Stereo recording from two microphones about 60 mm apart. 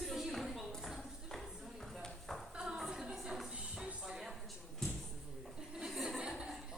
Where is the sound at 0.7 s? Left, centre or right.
Centre.